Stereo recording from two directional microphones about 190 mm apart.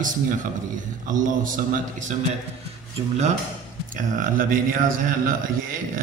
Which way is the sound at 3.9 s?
45° right (ahead or behind).